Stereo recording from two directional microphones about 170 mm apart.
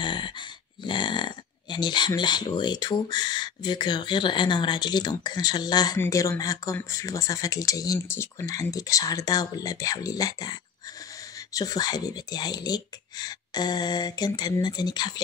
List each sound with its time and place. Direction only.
0.0 s speech: 30° left (ahead or behind)